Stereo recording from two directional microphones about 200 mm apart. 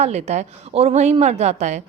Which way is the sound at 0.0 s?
35° right (ahead or behind).